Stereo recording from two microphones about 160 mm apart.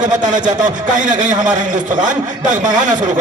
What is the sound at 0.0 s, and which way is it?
A man's voice, 50° right (ahead or behind).